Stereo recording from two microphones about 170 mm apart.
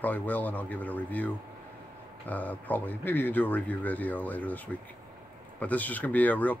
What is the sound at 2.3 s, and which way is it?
Speech, 10° left (ahead or behind).